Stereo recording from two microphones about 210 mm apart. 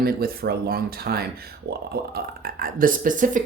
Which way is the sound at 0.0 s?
45° right (ahead or behind).